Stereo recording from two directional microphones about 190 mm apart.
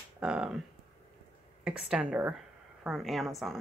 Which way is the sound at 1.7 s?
5° right (ahead or behind).